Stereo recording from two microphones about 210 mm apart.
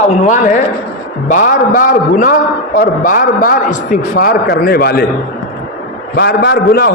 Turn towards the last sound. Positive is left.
turn(degrees=45)  # may be behind; listen again after turning